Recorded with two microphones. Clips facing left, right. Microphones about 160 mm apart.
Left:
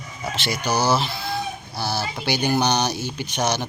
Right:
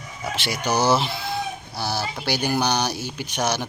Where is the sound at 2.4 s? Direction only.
5° right (ahead or behind).